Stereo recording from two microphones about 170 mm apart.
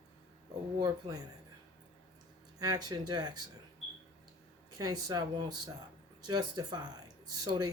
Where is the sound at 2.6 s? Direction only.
25° right (ahead or behind).